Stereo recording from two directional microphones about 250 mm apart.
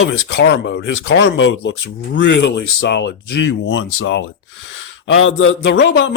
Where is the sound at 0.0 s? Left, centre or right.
Left.